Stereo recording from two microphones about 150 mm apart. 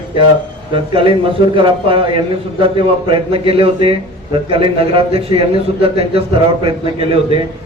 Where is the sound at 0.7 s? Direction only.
35° right (ahead or behind).